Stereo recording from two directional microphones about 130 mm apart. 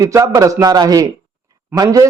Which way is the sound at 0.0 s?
25° right (ahead or behind).